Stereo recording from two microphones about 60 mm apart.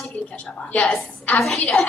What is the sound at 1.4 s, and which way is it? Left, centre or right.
Speech, centre.